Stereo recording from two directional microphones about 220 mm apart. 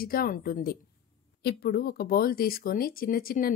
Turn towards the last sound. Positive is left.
turn(degrees=40)  # may be behind; listen again after turning